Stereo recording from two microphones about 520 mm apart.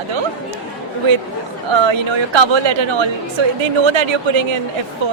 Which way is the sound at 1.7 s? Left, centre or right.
Right.